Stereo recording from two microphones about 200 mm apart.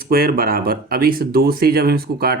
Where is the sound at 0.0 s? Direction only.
50° right (ahead or behind).